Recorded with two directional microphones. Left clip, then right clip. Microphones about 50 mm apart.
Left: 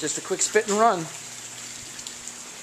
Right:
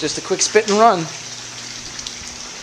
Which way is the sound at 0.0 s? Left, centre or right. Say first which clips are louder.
Right 8 dB; centre.